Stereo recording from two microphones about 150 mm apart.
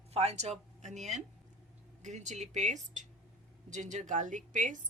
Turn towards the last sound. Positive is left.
turn(degrees=-55)  # may be behind; listen again after turning